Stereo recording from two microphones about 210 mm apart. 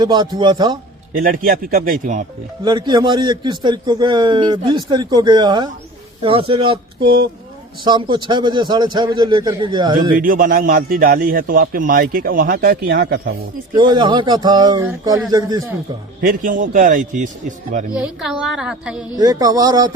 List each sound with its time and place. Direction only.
0.0 s a man's voice: 20° right (ahead or behind)
1.1 s speech: 40° right (ahead or behind)
2.6 s a man's voice: 20° right (ahead or behind)
10.2 s a man's voice: 40° right (ahead or behind)
13.7 s a man's voice: 20° right (ahead or behind)
16.2 s speech: 40° right (ahead or behind)
17.9 s a woman's voice: 5° right (ahead or behind)
19.1 s speech: 15° right (ahead or behind)